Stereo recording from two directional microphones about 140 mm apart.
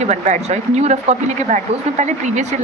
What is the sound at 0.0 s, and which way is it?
Speech, 55° right (ahead or behind).